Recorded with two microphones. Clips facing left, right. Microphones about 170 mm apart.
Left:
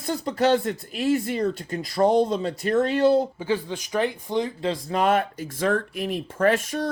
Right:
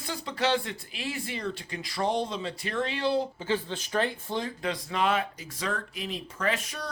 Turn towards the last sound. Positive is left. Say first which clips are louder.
# left 9 dB
turn(degrees=45)  # may be behind; listen again after turning